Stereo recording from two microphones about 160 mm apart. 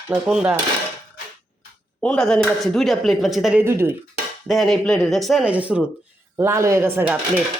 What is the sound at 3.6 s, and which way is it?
Speech, 15° right (ahead or behind).